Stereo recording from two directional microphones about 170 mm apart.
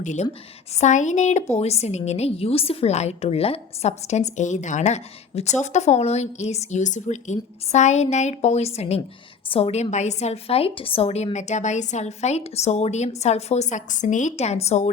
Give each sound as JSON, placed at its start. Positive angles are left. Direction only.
{"t": 0.0, "sound": "a woman's voice", "side_deg": 45}